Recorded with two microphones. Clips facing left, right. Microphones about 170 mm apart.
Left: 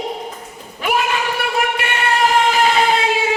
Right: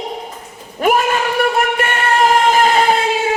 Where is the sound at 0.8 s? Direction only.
45° right (ahead or behind).